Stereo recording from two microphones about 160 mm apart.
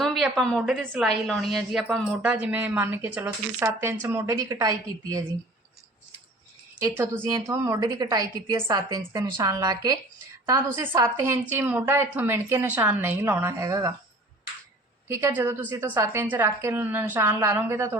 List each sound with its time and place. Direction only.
0.0 s a woman's voice: centre (ahead or behind); by 5.2 s 20° right (ahead or behind)
7.3 s a woman's voice: 20° right (ahead or behind)
15.0 s a woman's voice: 15° right (ahead or behind)